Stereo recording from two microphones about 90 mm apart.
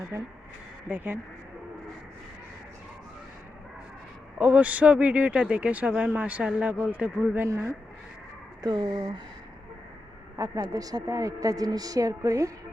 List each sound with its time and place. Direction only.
0.1 s a woman's voice: 35° right (ahead or behind)
0.9 s speech: 20° right (ahead or behind)
4.4 s a man's voice: 15° right (ahead or behind)
7.4 s a woman's voice: 35° right (ahead or behind)
8.6 s speech: 50° right (ahead or behind)
10.3 s a woman's voice: 40° right (ahead or behind)